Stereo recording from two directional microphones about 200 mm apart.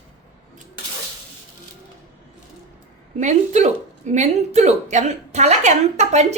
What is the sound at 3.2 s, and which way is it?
A woman's voice, 35° right (ahead or behind).